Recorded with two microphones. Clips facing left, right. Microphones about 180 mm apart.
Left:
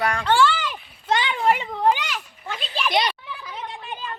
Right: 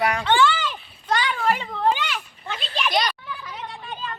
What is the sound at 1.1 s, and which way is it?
Children playing, 25° left (ahead or behind).